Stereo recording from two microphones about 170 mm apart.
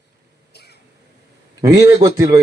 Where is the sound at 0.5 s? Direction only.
70° left (ahead or behind).